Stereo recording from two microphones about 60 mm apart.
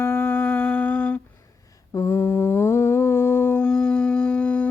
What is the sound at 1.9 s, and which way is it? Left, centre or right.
Mantra, left.